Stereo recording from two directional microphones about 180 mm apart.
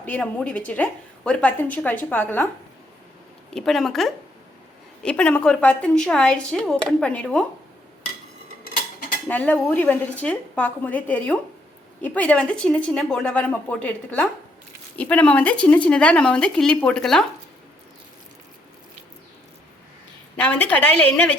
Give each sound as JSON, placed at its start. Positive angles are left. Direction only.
{"t": 0.0, "sound": "a woman's voice", "side_deg": 5}
{"t": 3.5, "sound": "speech", "side_deg": 0}
{"t": 8.6, "sound": "mechanisms", "side_deg": 55}
{"t": 9.3, "sound": "a woman's voice", "side_deg": 10}
{"t": 20.3, "sound": "a woman's voice", "side_deg": 5}